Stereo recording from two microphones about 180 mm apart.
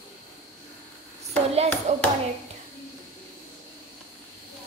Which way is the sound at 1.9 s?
40° right (ahead or behind).